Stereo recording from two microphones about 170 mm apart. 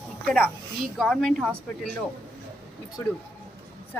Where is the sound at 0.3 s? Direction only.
10° left (ahead or behind).